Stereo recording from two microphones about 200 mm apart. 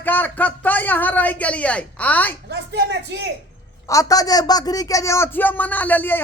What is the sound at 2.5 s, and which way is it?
Speech, 55° right (ahead or behind).